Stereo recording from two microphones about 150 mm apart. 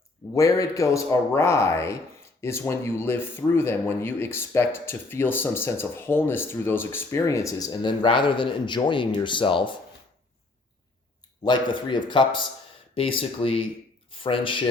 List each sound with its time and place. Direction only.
0.3 s a man's voice: 20° left (ahead or behind)
11.4 s speech: 30° left (ahead or behind)